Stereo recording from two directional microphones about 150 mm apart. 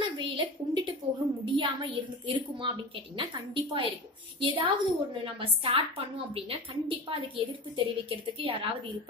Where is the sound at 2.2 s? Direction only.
35° right (ahead or behind).